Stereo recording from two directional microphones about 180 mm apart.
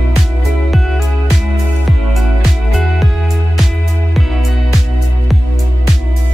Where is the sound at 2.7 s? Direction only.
Centre (ahead or behind).